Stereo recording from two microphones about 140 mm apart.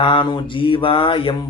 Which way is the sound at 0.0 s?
35° left (ahead or behind).